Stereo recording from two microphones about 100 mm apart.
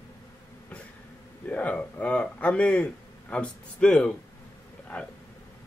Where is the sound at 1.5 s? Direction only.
15° left (ahead or behind).